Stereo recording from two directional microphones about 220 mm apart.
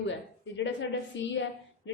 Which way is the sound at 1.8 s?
55° left (ahead or behind).